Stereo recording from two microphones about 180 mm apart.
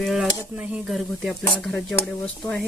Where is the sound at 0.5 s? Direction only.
5° right (ahead or behind).